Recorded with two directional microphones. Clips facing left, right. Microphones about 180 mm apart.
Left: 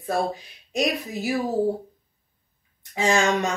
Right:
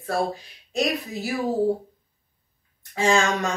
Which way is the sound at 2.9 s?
20° left (ahead or behind).